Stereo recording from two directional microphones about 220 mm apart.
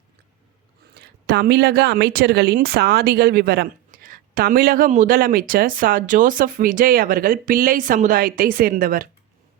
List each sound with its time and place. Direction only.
0.9 s speech: 50° right (ahead or behind)